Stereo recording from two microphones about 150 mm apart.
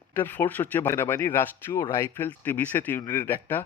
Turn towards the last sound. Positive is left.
turn(degrees=15)  # may be behind; listen again after turning